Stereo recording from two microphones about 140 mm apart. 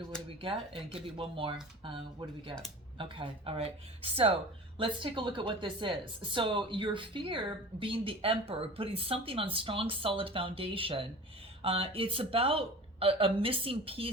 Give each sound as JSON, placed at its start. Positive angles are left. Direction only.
{"t": 0.3, "sound": "a woman's voice", "side_deg": -40}
{"t": 3.0, "sound": "a woman's voice", "side_deg": -40}